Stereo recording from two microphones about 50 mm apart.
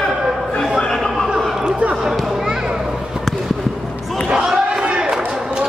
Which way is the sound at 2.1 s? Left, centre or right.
Centre.